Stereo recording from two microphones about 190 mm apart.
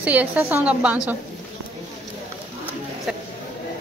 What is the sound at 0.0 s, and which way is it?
Speech, 10° right (ahead or behind).